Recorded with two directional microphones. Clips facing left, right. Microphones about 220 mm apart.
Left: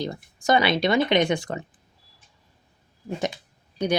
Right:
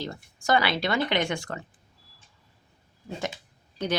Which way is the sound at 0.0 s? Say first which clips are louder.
Left 5 dB; 15° left (ahead or behind).